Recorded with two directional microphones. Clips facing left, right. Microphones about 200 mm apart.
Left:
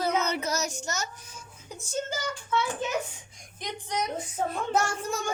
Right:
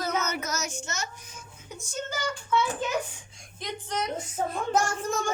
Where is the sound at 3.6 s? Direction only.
15° left (ahead or behind).